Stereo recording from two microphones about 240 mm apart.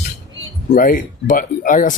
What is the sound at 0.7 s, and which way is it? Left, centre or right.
Speech, left.